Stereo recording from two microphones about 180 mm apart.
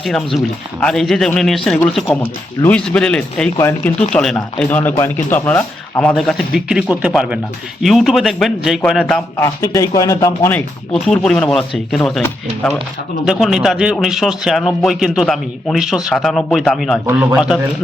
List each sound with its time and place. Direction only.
0.0 s speech: centre (ahead or behind)
9.4 s speech: 20° left (ahead or behind)
11.0 s speech: 5° left (ahead or behind)
13.2 s speech: centre (ahead or behind)